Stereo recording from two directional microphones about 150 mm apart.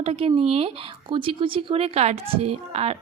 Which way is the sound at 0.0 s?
40° right (ahead or behind).